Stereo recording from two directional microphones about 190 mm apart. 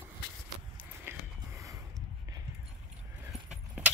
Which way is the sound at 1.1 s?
10° right (ahead or behind).